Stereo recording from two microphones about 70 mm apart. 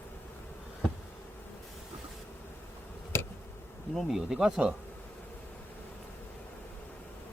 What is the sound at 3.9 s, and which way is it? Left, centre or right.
Speech, centre.